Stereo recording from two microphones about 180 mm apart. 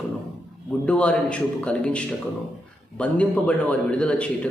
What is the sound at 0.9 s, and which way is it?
A man's voice, 5° left (ahead or behind).